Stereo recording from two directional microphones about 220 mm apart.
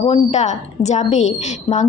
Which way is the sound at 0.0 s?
30° left (ahead or behind).